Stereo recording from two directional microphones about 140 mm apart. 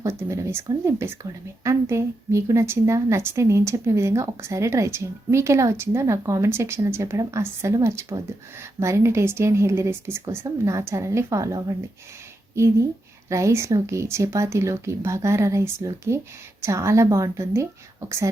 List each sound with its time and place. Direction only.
0.0 s a woman's voice: 20° right (ahead or behind)
13.2 s a woman's voice: 20° right (ahead or behind)